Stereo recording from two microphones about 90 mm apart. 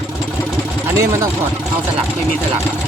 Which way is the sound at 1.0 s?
35° right (ahead or behind).